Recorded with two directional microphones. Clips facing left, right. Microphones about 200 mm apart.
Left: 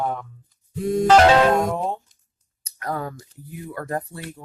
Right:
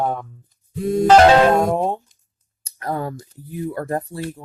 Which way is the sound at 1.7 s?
30° right (ahead or behind).